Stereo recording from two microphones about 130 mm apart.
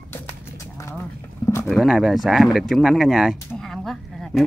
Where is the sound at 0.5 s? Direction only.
20° left (ahead or behind).